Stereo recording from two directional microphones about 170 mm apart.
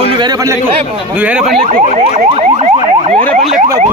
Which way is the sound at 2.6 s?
40° right (ahead or behind).